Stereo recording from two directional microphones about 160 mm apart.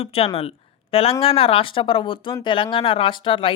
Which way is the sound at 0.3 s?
35° left (ahead or behind).